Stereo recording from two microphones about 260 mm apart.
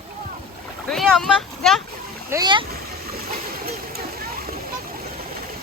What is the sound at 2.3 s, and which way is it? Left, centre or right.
Speech, centre.